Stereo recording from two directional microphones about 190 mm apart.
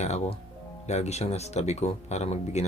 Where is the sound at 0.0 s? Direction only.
35° left (ahead or behind).